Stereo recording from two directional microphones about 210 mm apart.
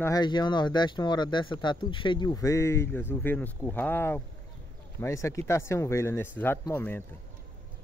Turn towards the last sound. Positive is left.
turn(degrees=10)  # may be behind; listen again after turning